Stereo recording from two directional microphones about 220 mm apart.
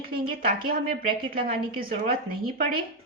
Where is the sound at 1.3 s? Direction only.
40° right (ahead or behind).